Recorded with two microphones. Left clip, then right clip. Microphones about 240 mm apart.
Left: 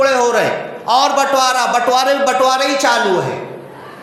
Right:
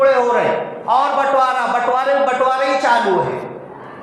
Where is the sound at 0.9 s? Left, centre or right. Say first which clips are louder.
Left 2 dB; left.